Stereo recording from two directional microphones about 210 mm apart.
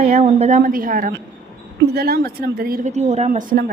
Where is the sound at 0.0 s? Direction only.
30° right (ahead or behind).